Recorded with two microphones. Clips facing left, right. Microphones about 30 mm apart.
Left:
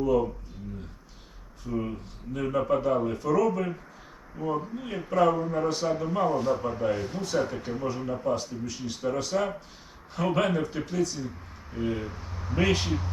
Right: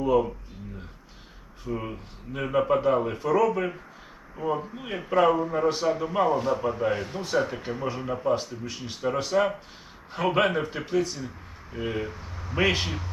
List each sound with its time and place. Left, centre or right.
0.0 s a man's voice: right
1.6 s a man's voice: right
12.0 s a sound: centre
12.5 s a man's voice: right